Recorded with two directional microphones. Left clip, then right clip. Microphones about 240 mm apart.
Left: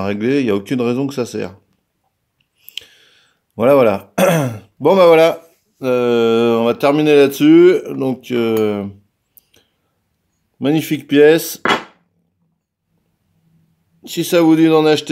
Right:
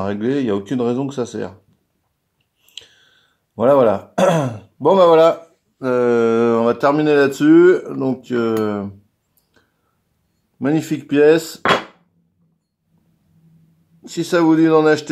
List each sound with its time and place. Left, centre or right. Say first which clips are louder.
0.0 s speech: left 3 dB; left
2.6 s speech: left 7 dB; left
10.6 s speech: left 2 dB; left
14.0 s speech: left 3 dB; left